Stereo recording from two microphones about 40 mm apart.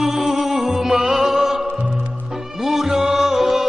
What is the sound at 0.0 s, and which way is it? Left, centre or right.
Music, centre.